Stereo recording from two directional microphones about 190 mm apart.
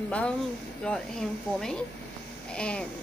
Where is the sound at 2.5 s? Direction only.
5° left (ahead or behind).